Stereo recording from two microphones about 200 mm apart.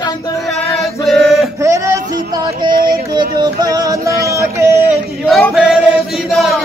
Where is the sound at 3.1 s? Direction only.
20° right (ahead or behind).